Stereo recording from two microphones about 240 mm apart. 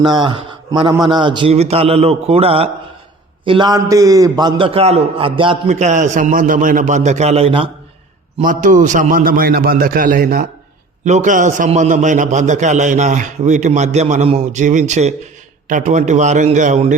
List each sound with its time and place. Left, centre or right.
0.0 s a man's voice: centre